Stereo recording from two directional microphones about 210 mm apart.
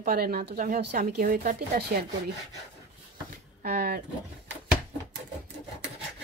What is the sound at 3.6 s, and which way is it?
Speech, 45° right (ahead or behind).